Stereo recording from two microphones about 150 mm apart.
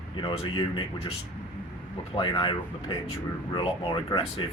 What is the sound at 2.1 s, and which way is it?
Speech, 35° left (ahead or behind).